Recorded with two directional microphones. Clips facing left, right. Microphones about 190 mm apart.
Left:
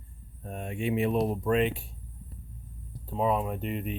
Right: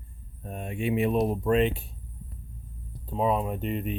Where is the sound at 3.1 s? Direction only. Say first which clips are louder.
Right 1 dB; 20° right (ahead or behind).